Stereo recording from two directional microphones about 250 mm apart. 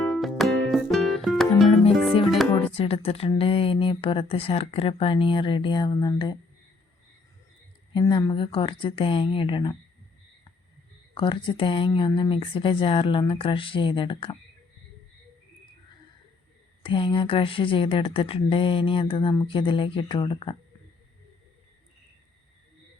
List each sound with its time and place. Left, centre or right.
0.0 s music: centre
2.7 s speech: left
7.9 s speech: centre
11.1 s speech: centre
16.8 s speech: centre